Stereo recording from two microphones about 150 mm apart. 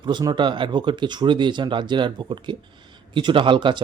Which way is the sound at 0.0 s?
30° right (ahead or behind).